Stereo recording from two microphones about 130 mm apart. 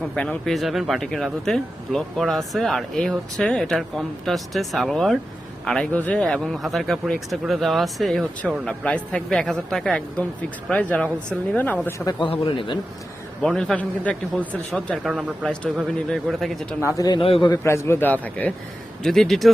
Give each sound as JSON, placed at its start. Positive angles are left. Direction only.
{"t": 0.2, "sound": "speech", "side_deg": 5}
{"t": 12.2, "sound": "a man's voice", "side_deg": 40}
{"t": 13.4, "sound": "speech", "side_deg": 5}
{"t": 17.2, "sound": "a man's voice", "side_deg": 45}
{"t": 17.5, "sound": "a man's voice", "side_deg": 20}